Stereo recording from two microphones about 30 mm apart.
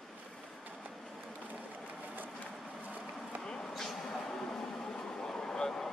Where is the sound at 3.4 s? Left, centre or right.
Centre.